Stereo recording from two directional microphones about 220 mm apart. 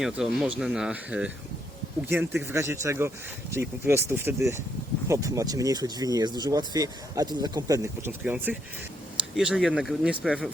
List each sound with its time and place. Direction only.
0.0 s speech: centre (ahead or behind)